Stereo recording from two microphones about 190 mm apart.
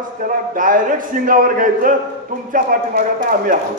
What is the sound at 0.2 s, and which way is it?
A man's voice, 45° right (ahead or behind).